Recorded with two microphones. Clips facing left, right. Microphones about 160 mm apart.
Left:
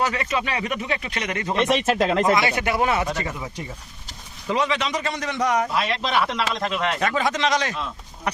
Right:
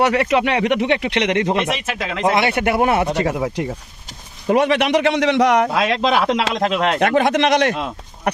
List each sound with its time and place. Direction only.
0.0 s a man's voice: 70° right (ahead or behind)
1.9 s speech: 40° left (ahead or behind)
2.3 s speech: 60° right (ahead or behind)
3.2 s a man's voice: 70° right (ahead or behind)
4.4 s a man's voice: 60° right (ahead or behind)